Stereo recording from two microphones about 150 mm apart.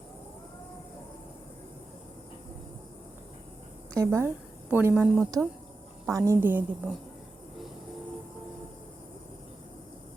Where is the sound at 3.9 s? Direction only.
20° right (ahead or behind).